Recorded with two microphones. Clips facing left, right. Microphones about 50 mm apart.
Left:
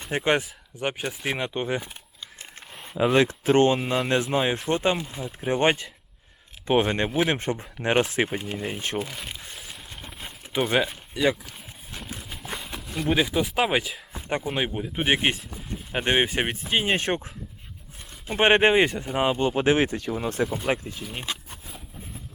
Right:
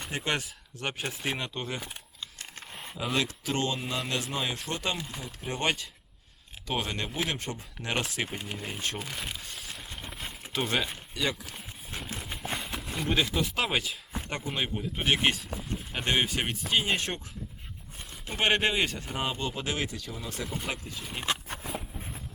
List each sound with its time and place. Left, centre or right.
0.1 s speech: left
1.4 s speech: left
3.0 s speech: left
8.5 s speech: centre
9.0 s speech: centre
9.3 s a sound: centre
10.5 s speech: centre
12.2 s a sound: centre
13.1 s speech: centre; by 17.2 s left
18.3 s speech: left
21.5 s a sound: right